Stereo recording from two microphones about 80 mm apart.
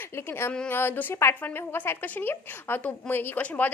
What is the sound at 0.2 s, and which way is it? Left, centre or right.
A woman's voice, left.